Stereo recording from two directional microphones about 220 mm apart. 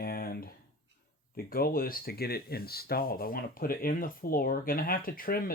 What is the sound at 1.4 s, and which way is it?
Speech, 40° left (ahead or behind).